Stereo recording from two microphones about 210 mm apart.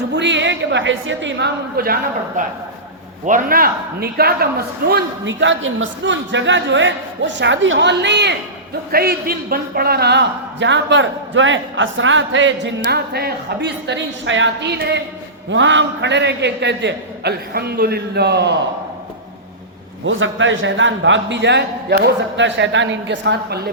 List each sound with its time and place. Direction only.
0.1 s a woman's voice: 55° right (ahead or behind)
20.1 s a man's voice: 65° right (ahead or behind); by 23.6 s 50° right (ahead or behind)